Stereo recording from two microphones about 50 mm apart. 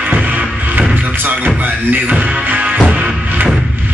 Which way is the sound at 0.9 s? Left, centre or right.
Right.